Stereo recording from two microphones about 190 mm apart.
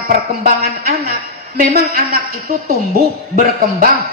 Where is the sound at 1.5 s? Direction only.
50° right (ahead or behind).